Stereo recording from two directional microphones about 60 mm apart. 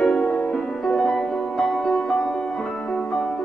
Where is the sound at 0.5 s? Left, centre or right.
Centre.